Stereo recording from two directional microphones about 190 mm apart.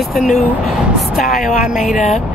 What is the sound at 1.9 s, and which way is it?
Speech, 35° left (ahead or behind).